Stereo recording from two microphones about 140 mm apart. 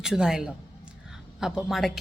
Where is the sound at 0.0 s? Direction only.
5° right (ahead or behind).